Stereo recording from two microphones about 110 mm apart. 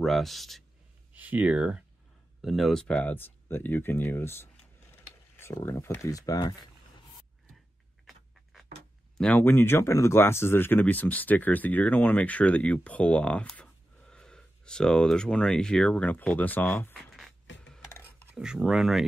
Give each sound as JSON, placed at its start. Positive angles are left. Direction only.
{"t": 0.0, "sound": "speech", "side_deg": 0}
{"t": 1.1, "sound": "speech", "side_deg": -15}
{"t": 2.4, "sound": "speech", "side_deg": 0}
{"t": 9.2, "sound": "speech", "side_deg": 15}
{"t": 18.0, "sound": "speech", "side_deg": -5}